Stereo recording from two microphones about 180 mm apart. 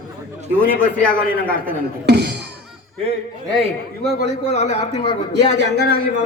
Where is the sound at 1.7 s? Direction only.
70° right (ahead or behind).